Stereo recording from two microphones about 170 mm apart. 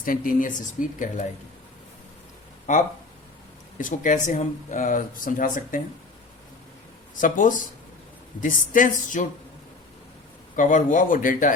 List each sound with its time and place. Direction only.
0.0 s speech: 55° left (ahead or behind)
2.7 s speech: 45° left (ahead or behind)
7.2 s speech: 50° left (ahead or behind)
10.5 s speech: 50° left (ahead or behind)